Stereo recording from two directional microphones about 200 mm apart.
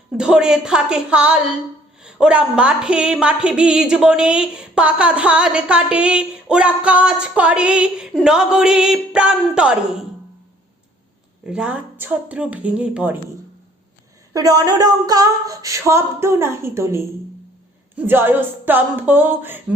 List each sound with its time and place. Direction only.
0.2 s a woman's voice: 5° right (ahead or behind)
11.4 s female singing: 5° right (ahead or behind)
14.3 s female singing: 15° right (ahead or behind)